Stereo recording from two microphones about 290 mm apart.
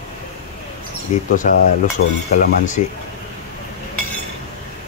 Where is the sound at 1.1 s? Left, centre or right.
Left.